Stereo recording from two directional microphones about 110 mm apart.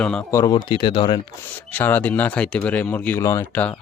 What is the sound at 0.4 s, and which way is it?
Speech, 45° left (ahead or behind).